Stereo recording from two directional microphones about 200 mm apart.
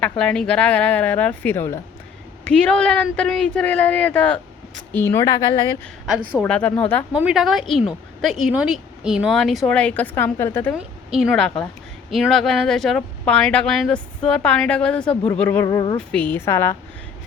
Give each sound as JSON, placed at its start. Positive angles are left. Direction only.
{"t": 0.0, "sound": "speech", "side_deg": 5}
{"t": 6.1, "sound": "speech", "side_deg": -5}
{"t": 6.4, "sound": "speech", "side_deg": 10}
{"t": 7.2, "sound": "speech", "side_deg": -5}
{"t": 10.8, "sound": "speech", "side_deg": 0}
{"t": 16.0, "sound": "speech", "side_deg": 10}